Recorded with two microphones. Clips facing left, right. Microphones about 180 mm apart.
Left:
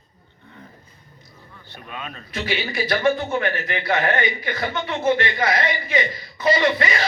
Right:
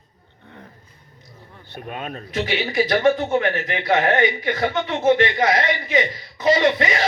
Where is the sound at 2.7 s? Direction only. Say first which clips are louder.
Right 3 dB; 20° right (ahead or behind).